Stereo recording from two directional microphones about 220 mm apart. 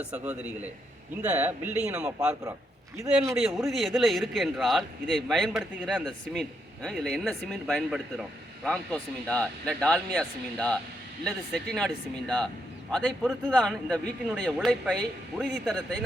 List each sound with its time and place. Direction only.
0.0 s a man's voice: 5° right (ahead or behind)
3.3 s a man's voice: centre (ahead or behind)
12.9 s a man's voice: 5° left (ahead or behind)